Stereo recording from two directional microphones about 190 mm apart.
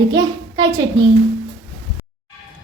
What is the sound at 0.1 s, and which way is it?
Speech, 20° right (ahead or behind).